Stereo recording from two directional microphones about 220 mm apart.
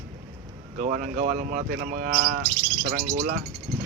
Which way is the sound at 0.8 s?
35° right (ahead or behind).